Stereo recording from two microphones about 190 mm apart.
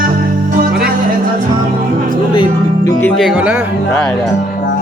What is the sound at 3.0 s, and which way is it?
Speech, 10° left (ahead or behind).